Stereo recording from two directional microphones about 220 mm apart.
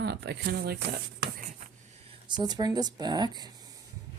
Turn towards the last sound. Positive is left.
turn(degrees=-20)  # may be behind; listen again after turning